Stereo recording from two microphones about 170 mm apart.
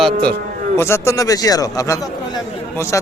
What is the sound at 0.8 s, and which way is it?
Speech, 15° left (ahead or behind).